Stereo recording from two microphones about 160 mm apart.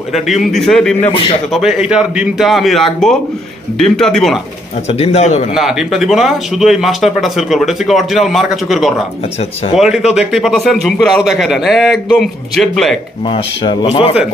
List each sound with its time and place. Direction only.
0.1 s speech: centre (ahead or behind)
4.8 s a man's voice: 40° left (ahead or behind)
5.5 s speech: centre (ahead or behind)
13.2 s speech: 30° left (ahead or behind)